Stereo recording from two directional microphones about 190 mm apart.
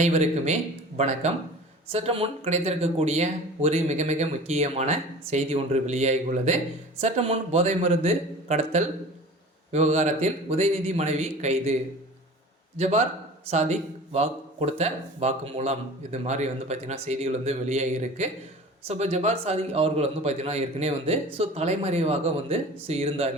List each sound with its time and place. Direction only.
0.0 s speech: 35° right (ahead or behind)